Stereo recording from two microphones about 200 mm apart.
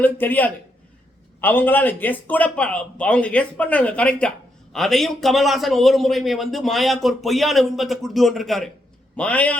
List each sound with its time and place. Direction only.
0.0 s a man's voice: 10° left (ahead or behind)